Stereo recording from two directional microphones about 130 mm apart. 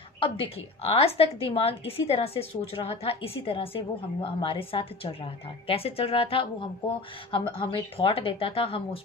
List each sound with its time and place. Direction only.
0.2 s a woman's voice: 45° left (ahead or behind)